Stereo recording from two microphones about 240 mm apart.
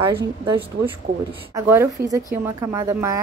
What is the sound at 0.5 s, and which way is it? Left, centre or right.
A woman's voice, centre.